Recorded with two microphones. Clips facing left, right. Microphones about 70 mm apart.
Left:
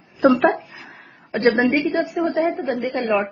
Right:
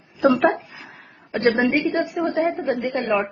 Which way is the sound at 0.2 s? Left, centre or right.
Centre.